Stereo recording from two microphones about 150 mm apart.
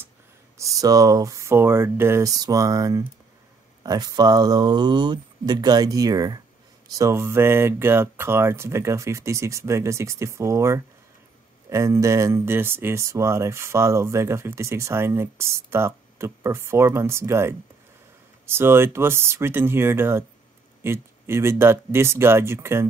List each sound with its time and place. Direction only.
0.6 s speech: 20° right (ahead or behind)